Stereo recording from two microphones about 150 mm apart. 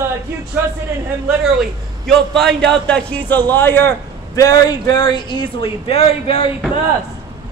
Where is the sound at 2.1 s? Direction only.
5° left (ahead or behind); by 6.5 s 40° left (ahead or behind).